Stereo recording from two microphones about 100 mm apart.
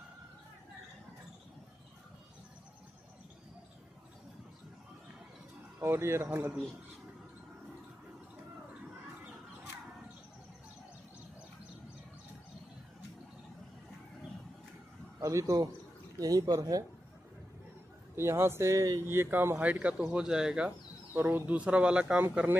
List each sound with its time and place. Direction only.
5.8 s speech: 25° right (ahead or behind)
15.1 s a man's voice: 35° right (ahead or behind)
18.1 s speech: 25° right (ahead or behind)